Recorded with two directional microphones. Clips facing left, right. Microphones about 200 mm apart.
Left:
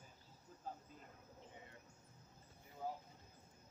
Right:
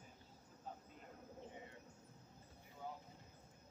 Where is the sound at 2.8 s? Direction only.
35° left (ahead or behind).